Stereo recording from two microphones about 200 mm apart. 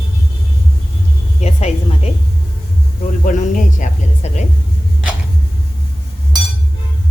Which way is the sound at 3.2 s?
40° left (ahead or behind).